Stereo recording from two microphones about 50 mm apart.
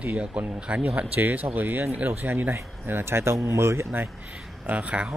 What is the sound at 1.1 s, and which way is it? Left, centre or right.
Speech, right.